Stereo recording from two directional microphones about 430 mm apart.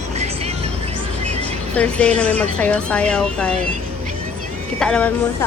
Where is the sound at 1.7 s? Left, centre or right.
Centre.